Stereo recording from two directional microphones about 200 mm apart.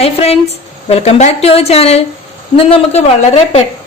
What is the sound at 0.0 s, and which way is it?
A woman's voice, 30° left (ahead or behind).